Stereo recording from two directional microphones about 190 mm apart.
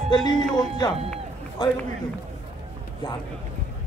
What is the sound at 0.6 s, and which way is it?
Speech, 20° left (ahead or behind).